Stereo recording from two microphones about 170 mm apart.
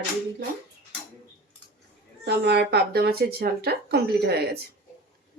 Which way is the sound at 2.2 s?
80° right.